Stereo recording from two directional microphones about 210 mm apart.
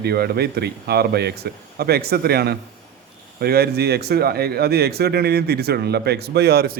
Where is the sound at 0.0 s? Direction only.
50° right (ahead or behind).